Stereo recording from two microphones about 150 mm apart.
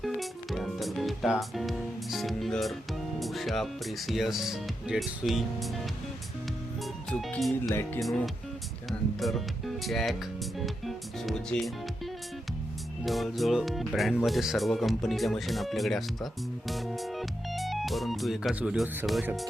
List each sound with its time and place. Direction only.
0.0 s music: centre (ahead or behind)
3.2 s speech: centre (ahead or behind)
7.1 s speech: 5° left (ahead or behind)
7.7 s speech: 20° left (ahead or behind)
8.9 s speech: centre (ahead or behind)
13.1 s speech: centre (ahead or behind)